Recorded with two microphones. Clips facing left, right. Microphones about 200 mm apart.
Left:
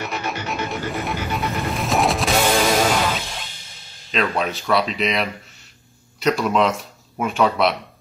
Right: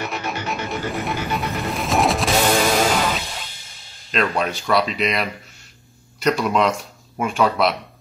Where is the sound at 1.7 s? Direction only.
Centre (ahead or behind).